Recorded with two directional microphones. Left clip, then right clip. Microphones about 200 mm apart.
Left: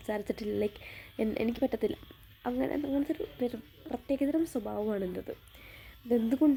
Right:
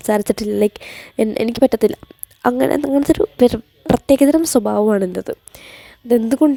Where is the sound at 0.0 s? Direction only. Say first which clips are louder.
Right 17 dB; 45° right (ahead or behind).